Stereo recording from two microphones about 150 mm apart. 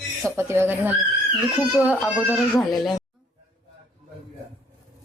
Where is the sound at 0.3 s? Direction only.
15° right (ahead or behind).